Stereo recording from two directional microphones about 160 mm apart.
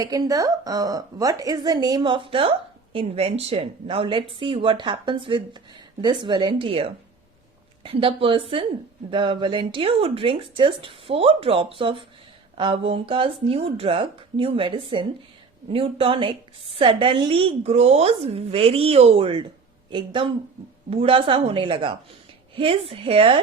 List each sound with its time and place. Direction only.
0.0 s a woman's voice: 20° right (ahead or behind)
7.9 s speech: 35° right (ahead or behind)